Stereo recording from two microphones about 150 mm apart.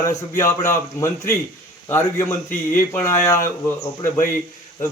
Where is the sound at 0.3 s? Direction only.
15° left (ahead or behind).